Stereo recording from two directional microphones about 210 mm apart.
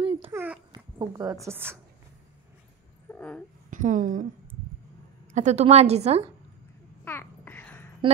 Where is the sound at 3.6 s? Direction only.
40° right (ahead or behind).